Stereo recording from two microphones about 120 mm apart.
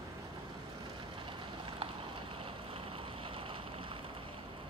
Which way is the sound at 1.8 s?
50° right (ahead or behind).